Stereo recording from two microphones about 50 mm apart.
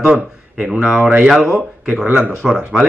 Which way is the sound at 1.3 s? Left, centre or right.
Centre.